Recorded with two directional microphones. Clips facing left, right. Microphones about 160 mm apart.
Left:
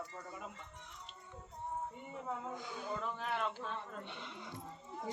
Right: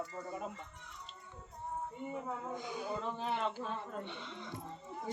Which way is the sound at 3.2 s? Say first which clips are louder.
Right 3 dB; 25° right (ahead or behind).